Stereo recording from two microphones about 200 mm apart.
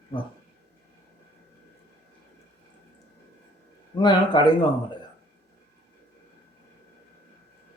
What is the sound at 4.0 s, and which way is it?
Speech, 20° left (ahead or behind).